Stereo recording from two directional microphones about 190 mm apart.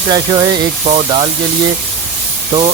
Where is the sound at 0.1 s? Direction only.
20° right (ahead or behind).